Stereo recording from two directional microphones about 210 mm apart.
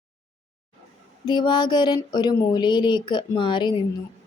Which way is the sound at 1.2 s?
20° left (ahead or behind).